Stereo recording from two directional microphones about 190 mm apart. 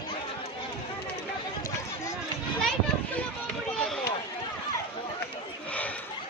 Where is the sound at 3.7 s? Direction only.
Centre (ahead or behind).